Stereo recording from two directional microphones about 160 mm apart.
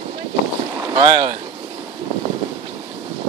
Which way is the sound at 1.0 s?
20° right (ahead or behind).